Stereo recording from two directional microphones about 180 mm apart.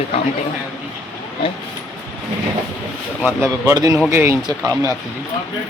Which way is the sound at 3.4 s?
15° right (ahead or behind).